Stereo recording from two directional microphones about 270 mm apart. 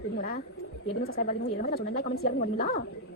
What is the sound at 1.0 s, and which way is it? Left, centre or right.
A woman's voice, left.